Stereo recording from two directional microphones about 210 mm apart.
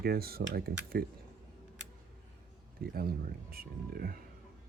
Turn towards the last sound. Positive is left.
turn(degrees=-45)  # may be behind; listen again after turning